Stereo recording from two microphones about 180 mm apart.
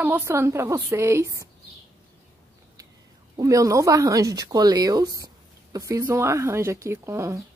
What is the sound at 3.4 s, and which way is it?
A woman's voice, 20° right (ahead or behind).